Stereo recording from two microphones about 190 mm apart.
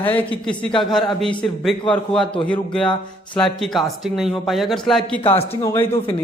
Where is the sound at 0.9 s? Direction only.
Centre (ahead or behind).